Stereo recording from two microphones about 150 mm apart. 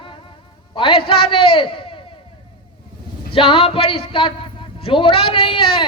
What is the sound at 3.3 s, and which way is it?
A man's voice, 35° left (ahead or behind).